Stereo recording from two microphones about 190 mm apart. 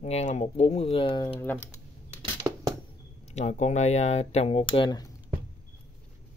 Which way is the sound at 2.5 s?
15° right (ahead or behind).